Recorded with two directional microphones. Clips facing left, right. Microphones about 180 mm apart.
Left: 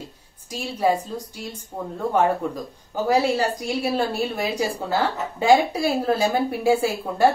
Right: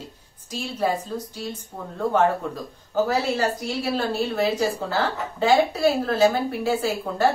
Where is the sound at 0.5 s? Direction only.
10° left (ahead or behind).